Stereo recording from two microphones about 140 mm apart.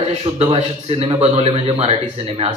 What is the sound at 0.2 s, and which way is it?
Speech, 45° right (ahead or behind).